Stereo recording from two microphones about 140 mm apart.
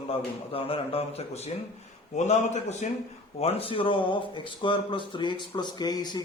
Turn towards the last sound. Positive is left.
turn(degrees=30)  # may be behind; listen again after turning